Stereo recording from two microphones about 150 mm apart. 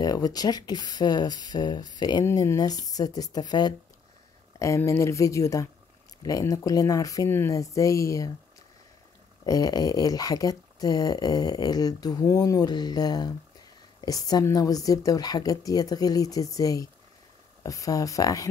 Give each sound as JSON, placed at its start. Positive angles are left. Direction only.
{"t": 0.0, "sound": "speech", "side_deg": 25}
{"t": 9.5, "sound": "speech", "side_deg": 25}